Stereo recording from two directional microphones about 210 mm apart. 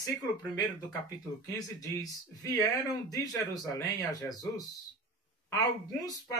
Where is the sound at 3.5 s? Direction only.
15° left (ahead or behind).